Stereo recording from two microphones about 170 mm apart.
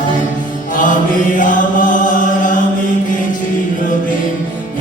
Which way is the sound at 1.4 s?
50° left (ahead or behind).